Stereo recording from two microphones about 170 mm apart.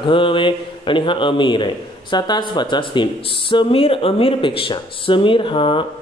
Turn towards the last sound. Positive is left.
turn(degrees=30)  # may be behind; listen again after turning